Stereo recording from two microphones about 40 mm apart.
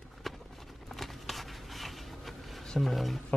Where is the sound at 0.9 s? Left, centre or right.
Centre.